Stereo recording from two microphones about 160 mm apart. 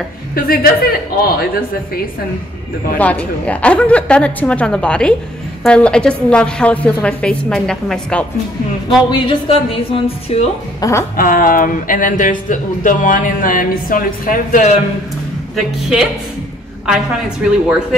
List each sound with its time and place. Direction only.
0.3 s a woman's voice: 70° left (ahead or behind)
3.0 s a woman's voice: 10° left (ahead or behind)
9.1 s a woman's voice: 35° left (ahead or behind)
10.8 s a sound: 20° left (ahead or behind)
11.1 s speech: 60° left (ahead or behind)
15.5 s a woman's voice: centre (ahead or behind)